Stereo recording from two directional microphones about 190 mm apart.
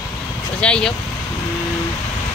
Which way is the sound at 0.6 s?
5° left (ahead or behind).